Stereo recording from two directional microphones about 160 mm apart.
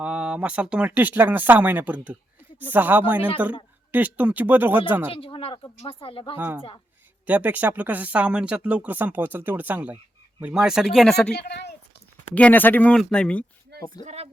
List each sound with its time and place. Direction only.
0.0 s speech: 5° right (ahead or behind)
5.1 s speech: 35° left (ahead or behind)
7.3 s speech: 10° right (ahead or behind)
11.3 s a woman's voice: 90° left
12.3 s speech: 10° left (ahead or behind)
14.0 s speech: 45° right (ahead or behind)